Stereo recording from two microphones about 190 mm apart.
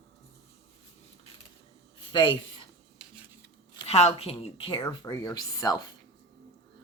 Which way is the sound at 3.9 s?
30° left (ahead or behind).